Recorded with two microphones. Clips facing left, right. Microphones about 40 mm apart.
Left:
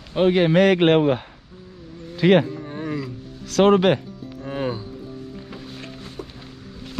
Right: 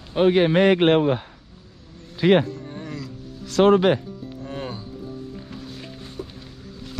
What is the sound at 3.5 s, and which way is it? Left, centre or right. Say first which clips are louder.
Speech: even; left.